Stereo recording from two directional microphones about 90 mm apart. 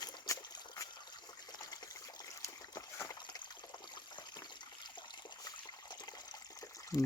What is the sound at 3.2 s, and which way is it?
Trickle, 55° left (ahead or behind).